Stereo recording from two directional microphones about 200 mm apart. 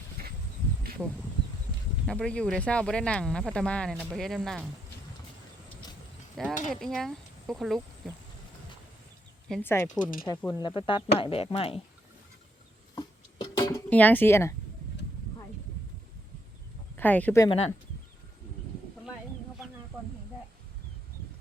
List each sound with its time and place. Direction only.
1.0 s speech: 5° right (ahead or behind)
2.0 s speech: 5° left (ahead or behind)
6.7 s speech: centre (ahead or behind)
9.5 s speech: 10° left (ahead or behind)
10.0 s speech: 45° left (ahead or behind)
10.5 s speech: 25° left (ahead or behind)
13.0 s a sound: 20° left (ahead or behind)
13.9 s speech: 10° left (ahead or behind)
16.9 s speech: 10° left (ahead or behind)
17.4 s speech: 25° left (ahead or behind)